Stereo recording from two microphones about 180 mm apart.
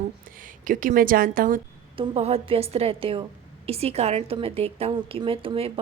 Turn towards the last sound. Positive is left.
turn(degrees=-30)  # may be behind; listen again after turning